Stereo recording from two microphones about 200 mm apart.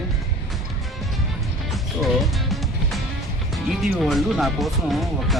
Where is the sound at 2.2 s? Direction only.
Centre (ahead or behind).